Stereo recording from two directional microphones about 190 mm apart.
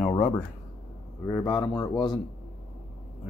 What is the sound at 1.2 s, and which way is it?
Speech, 15° left (ahead or behind).